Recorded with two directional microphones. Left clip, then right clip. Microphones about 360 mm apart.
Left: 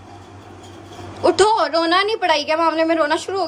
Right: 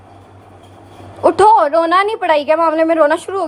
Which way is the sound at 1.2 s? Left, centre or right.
Centre.